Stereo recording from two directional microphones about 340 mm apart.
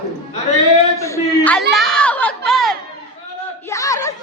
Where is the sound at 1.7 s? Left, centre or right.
Centre.